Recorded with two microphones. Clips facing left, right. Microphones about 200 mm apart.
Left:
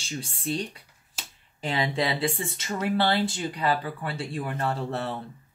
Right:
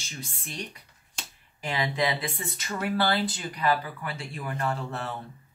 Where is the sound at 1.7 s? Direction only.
30° left (ahead or behind).